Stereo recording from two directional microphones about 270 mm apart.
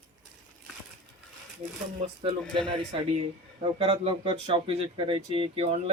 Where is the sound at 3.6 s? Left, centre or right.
Right.